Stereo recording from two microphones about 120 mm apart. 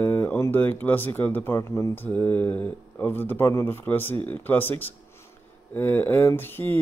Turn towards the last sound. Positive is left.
turn(degrees=15)  # may be behind; listen again after turning